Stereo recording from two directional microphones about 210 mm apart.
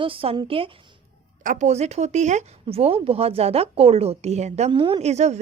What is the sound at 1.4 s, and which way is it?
A woman's voice, 35° right (ahead or behind).